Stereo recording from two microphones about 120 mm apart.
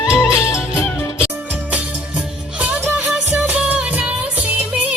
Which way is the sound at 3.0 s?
10° right (ahead or behind).